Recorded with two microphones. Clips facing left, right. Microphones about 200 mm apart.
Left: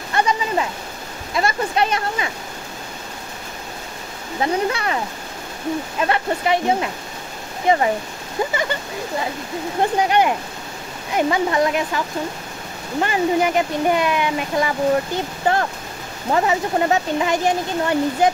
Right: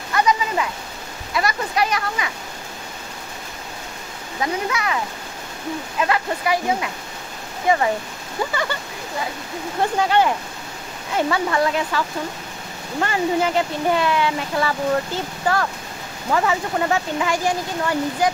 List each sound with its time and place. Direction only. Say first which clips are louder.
0.1 s a sound: even; 30° left (ahead or behind)
1.3 s speech: left 2 dB; 25° left (ahead or behind)
4.4 s speech: left 3 dB; 35° left (ahead or behind)
8.4 s a sound: left 3 dB; 20° left (ahead or behind)
9.9 s speech: even; 15° left (ahead or behind)
13.0 s speech: left 2 dB; 15° left (ahead or behind)